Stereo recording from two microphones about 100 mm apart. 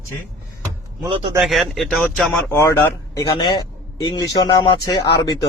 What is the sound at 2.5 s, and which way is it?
Speech, 25° left (ahead or behind).